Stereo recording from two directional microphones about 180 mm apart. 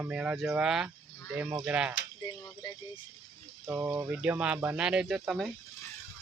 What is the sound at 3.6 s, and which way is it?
Speech, 15° right (ahead or behind).